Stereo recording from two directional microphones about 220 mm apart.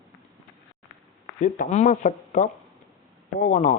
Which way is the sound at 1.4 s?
35° left (ahead or behind).